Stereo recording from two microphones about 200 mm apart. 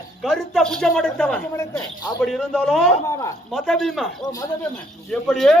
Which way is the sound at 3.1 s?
15° left (ahead or behind).